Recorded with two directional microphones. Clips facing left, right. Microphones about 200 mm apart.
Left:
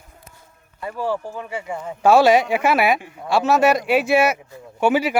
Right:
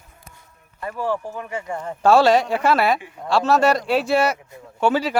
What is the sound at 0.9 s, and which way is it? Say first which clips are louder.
Speech: even; 10° left (ahead or behind).